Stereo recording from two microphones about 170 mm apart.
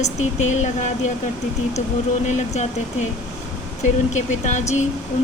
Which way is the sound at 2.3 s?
40° left (ahead or behind).